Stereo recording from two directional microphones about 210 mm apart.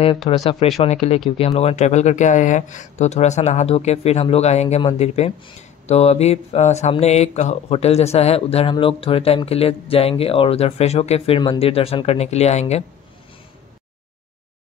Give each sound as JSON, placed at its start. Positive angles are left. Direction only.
{"t": 0.3, "sound": "speech", "side_deg": 30}